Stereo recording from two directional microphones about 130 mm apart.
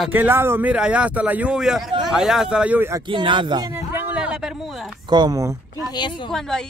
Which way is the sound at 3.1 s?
40° right (ahead or behind).